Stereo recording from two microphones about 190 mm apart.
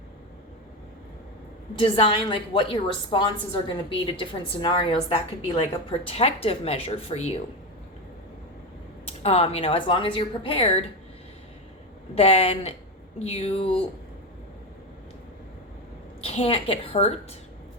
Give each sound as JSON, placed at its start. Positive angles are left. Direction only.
{"t": 1.8, "sound": "a woman's voice", "side_deg": 30}
{"t": 9.0, "sound": "a woman's voice", "side_deg": 30}
{"t": 12.1, "sound": "speech", "side_deg": 30}
{"t": 16.2, "sound": "speech", "side_deg": 30}